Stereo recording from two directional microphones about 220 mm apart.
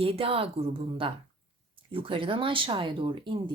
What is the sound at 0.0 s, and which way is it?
Speech, 25° right (ahead or behind).